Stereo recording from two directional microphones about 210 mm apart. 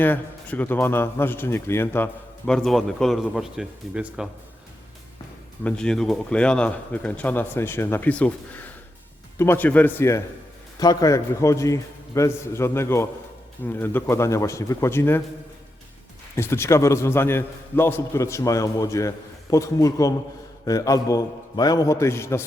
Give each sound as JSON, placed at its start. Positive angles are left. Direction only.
{"t": 0.0, "sound": "a man's voice", "side_deg": 10}
{"t": 5.6, "sound": "a man's voice", "side_deg": 5}
{"t": 16.3, "sound": "a man's voice", "side_deg": 10}